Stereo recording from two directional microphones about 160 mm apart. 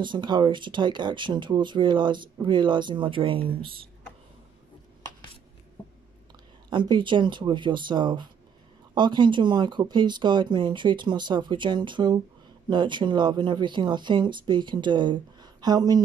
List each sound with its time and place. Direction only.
0.0 s speech: 30° right (ahead or behind)
6.7 s speech: 30° right (ahead or behind)